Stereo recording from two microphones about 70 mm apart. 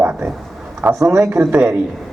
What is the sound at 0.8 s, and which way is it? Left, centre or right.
Speech, right.